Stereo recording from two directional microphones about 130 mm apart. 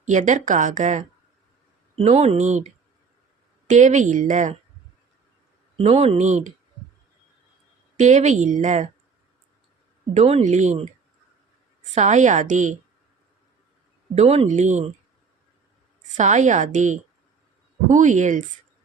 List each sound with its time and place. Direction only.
0.0 s speech: 70° right (ahead or behind)
2.0 s speech: 55° right (ahead or behind)
3.7 s speech: 70° right (ahead or behind)
5.7 s speech: 55° right (ahead or behind)
7.9 s speech: 65° right (ahead or behind)
10.2 s speech: 55° right (ahead or behind)
11.9 s speech: 65° right (ahead or behind)
14.2 s speech: 55° right (ahead or behind)
16.1 s speech: 65° right (ahead or behind)